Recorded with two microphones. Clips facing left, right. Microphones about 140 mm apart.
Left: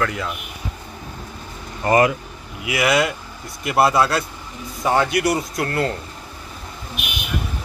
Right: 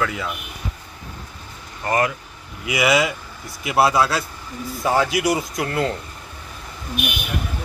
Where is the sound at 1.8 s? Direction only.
10° left (ahead or behind).